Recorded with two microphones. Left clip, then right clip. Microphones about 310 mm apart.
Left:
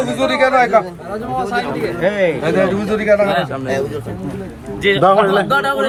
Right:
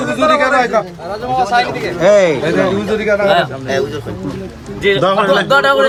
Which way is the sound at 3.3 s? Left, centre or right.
Centre.